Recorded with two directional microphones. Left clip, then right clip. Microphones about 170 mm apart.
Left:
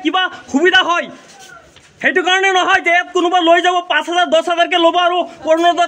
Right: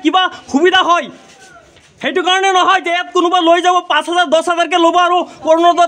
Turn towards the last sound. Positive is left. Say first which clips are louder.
# right 3 dB
turn(degrees=-25)  # may be behind; listen again after turning